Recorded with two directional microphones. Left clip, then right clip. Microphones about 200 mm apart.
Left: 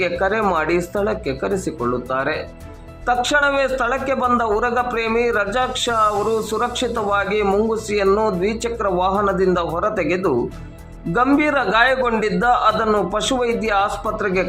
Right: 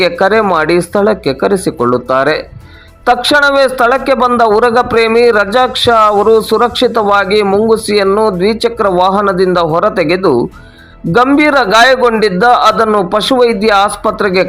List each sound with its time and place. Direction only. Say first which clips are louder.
0.0 s speech: right 9 dB; 30° right (ahead or behind)
8.0 s speech: right 3 dB; 15° right (ahead or behind)
8.4 s speech: right 10 dB; 25° right (ahead or behind)
11.3 s speech: right 10 dB; 30° right (ahead or behind)
12.8 s speech: right 8 dB; 15° right (ahead or behind)
13.1 s speech: right 10 dB; 30° right (ahead or behind)